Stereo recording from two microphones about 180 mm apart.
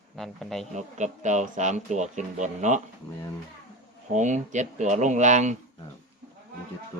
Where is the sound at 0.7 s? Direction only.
40° right (ahead or behind).